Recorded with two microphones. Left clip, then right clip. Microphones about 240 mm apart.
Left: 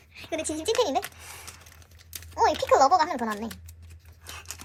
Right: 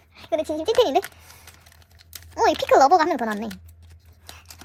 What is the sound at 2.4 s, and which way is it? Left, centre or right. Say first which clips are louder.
A child's voice: right 4 dB; right.